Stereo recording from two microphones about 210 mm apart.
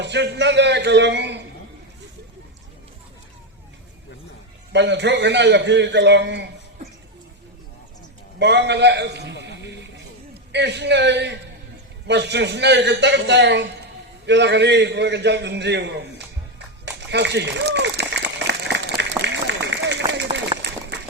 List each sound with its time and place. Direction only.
0.0 s a man's voice: 55° right (ahead or behind)
4.7 s a man's voice: 55° right (ahead or behind)
8.4 s a man's voice: 55° right (ahead or behind)
16.8 s run: 55° right (ahead or behind)